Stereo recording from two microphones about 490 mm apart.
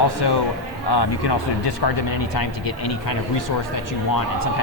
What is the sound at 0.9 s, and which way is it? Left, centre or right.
Speech, left.